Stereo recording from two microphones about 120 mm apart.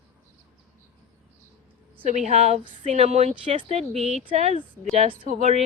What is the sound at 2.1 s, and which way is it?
A woman's voice, 75° right (ahead or behind).